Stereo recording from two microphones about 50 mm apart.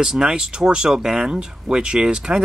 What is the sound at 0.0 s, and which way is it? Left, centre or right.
Speech, centre.